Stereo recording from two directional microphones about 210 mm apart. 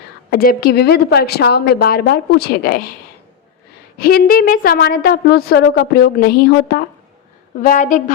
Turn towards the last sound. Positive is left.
turn(degrees=40)  # may be behind; listen again after turning